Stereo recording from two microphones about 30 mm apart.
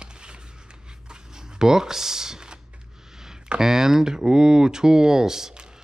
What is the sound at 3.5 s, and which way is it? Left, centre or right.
Speech, centre.